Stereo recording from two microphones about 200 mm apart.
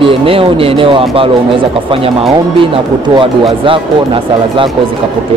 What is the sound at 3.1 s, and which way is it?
Speech, 25° right (ahead or behind).